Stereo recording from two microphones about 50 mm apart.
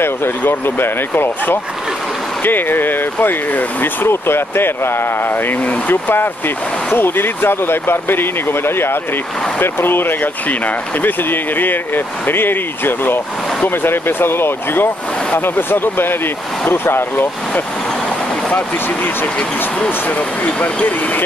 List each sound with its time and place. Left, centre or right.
0.0 s speech: left
20.2 s speech: left